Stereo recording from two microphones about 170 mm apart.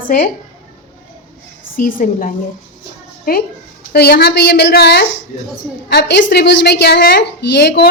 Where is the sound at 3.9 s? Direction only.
75° left (ahead or behind).